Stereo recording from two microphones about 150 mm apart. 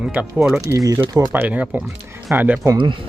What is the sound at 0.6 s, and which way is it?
Speech, 25° right (ahead or behind).